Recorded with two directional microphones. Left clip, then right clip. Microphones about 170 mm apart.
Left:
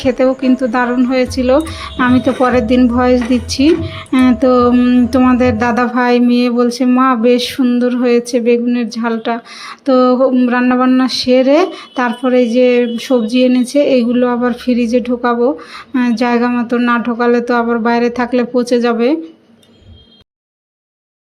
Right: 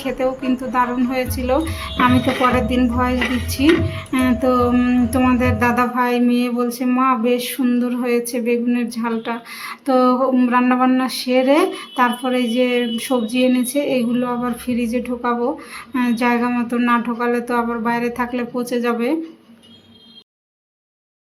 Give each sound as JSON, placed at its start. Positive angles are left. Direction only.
{"t": 0.0, "sound": "a woman's voice", "side_deg": 30}